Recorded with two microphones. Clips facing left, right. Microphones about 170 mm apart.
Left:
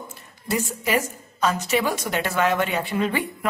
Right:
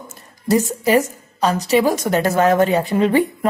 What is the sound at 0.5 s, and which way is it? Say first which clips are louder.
A woman's voice: right 8 dB; 40° right (ahead or behind).